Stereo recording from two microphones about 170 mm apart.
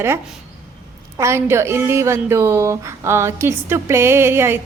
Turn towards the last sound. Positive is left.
turn(degrees=-15)  # may be behind; listen again after turning